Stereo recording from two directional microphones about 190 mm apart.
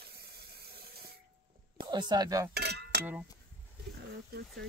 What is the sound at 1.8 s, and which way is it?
Speech, 25° right (ahead or behind).